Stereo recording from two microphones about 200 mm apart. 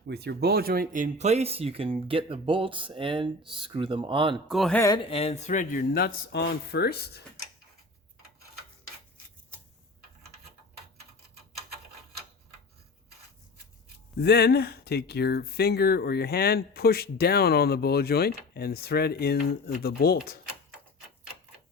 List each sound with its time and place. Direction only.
0.1 s speech: 55° right (ahead or behind); by 4.4 s 25° right (ahead or behind)
4.4 s speech: centre (ahead or behind)
5.0 s speech: 30° left (ahead or behind); by 7.3 s 55° left (ahead or behind)
14.2 s speech: 55° left (ahead or behind)